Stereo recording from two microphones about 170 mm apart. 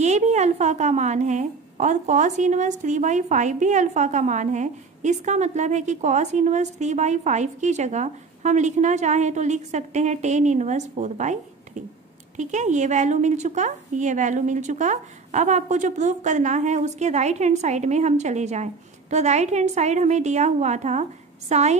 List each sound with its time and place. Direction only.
0.0 s a woman's voice: 40° right (ahead or behind)